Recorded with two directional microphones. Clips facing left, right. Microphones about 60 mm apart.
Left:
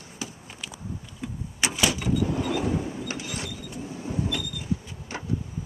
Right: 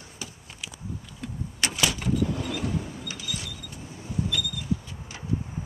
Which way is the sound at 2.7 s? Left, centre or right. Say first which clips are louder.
Left 3 dB; left.